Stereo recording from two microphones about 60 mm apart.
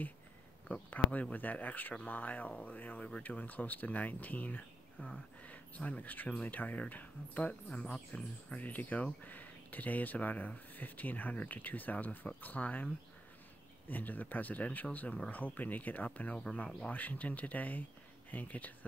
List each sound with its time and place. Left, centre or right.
0.8 s speech: left
7.7 s speech: centre
8.5 s speech: left